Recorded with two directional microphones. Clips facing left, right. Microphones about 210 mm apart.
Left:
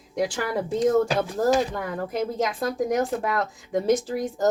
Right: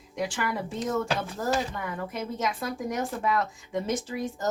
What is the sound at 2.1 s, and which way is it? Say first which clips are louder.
Speech: left 6 dB; 35° left (ahead or behind).